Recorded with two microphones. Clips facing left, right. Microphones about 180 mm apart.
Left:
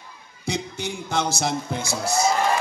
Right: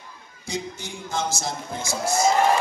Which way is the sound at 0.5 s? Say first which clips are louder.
Left 3 dB; 70° left (ahead or behind).